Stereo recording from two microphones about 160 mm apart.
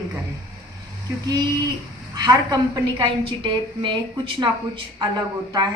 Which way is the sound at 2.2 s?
25° right (ahead or behind).